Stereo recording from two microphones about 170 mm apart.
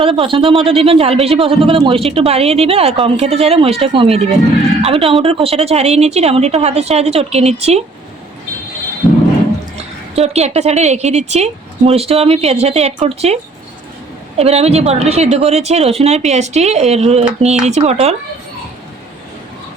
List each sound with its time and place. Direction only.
0.0 s speech: 30° right (ahead or behind)
9.7 s speech: 40° right (ahead or behind)